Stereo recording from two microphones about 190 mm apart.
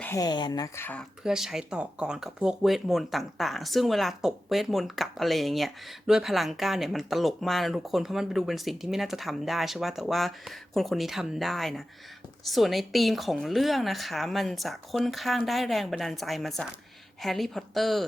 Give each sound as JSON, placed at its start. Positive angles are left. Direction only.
{"t": 0.0, "sound": "speech", "side_deg": 15}
{"t": 1.2, "sound": "speech", "side_deg": -5}